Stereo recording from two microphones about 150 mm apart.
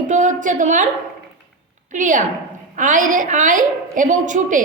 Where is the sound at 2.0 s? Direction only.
60° right (ahead or behind).